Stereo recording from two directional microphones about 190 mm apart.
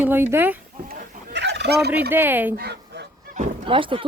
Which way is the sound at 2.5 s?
55° right (ahead or behind).